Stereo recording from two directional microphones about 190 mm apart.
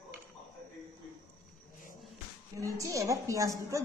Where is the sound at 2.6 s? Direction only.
15° right (ahead or behind).